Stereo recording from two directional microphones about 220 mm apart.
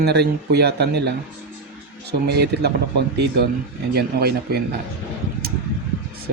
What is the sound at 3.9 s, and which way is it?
Speech, 45° right (ahead or behind).